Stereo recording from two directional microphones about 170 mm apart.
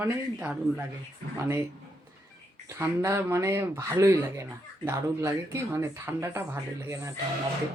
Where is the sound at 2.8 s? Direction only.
15° right (ahead or behind).